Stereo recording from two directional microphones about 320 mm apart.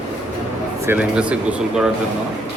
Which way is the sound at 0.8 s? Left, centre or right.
Centre.